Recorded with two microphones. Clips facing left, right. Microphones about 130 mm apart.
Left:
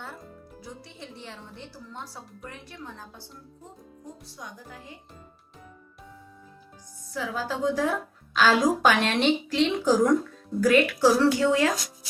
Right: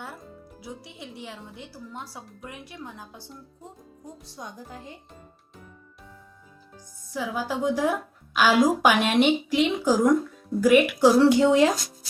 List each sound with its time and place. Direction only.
0.6 s a woman's voice: 10° right (ahead or behind)
4.4 s speech: 30° right (ahead or behind)
7.1 s a woman's voice: 15° right (ahead or behind)